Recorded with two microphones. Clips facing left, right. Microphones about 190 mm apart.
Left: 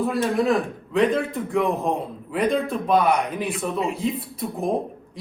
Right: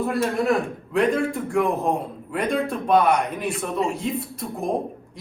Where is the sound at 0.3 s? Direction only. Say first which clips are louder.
Left 1 dB; centre (ahead or behind).